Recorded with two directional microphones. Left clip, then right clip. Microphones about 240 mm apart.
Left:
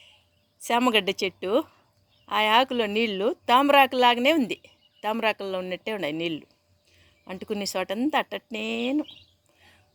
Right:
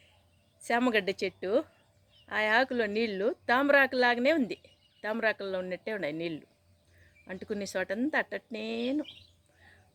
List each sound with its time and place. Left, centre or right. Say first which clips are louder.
0.6 s a woman's voice: left 5 dB; left